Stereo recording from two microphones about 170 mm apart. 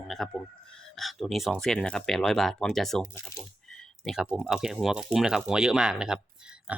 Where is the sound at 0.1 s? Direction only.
Centre (ahead or behind).